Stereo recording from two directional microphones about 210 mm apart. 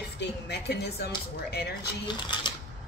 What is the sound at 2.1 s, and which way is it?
Speech, 20° left (ahead or behind).